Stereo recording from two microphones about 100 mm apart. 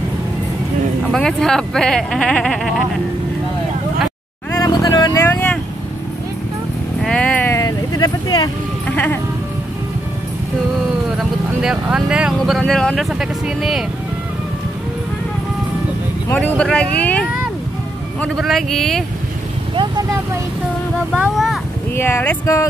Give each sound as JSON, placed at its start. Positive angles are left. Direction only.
{"t": 1.1, "sound": "speech", "side_deg": 5}
{"t": 4.6, "sound": "music", "side_deg": 40}
{"t": 5.2, "sound": "speech", "side_deg": 15}
{"t": 7.0, "sound": "vehicle", "side_deg": 5}
{"t": 7.4, "sound": "vehicle", "side_deg": 30}
{"t": 8.8, "sound": "speech", "side_deg": 15}
{"t": 11.1, "sound": "speech", "side_deg": -5}
{"t": 16.3, "sound": "speech", "side_deg": 10}
{"t": 18.3, "sound": "speech", "side_deg": 0}
{"t": 21.2, "sound": "speech", "side_deg": -5}
{"t": 21.9, "sound": "speech", "side_deg": 25}